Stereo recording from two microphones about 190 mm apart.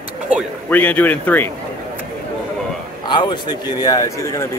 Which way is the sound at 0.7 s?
10° left (ahead or behind).